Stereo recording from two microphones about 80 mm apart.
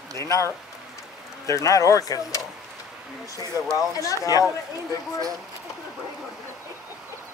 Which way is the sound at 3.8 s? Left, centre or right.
Left.